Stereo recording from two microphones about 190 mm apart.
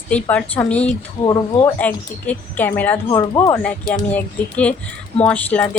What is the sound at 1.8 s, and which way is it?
Speech, 10° left (ahead or behind).